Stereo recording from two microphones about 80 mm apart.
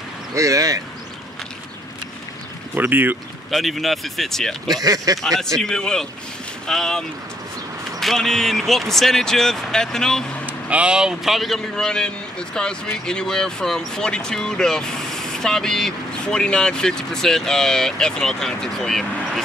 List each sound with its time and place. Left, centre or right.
0.3 s speech: right
2.7 s speech: right
3.4 s speech: centre
4.6 s speech: right
5.6 s speech: centre
10.4 s speech: centre